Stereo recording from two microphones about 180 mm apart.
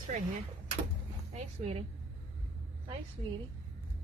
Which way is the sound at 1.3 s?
35° right (ahead or behind).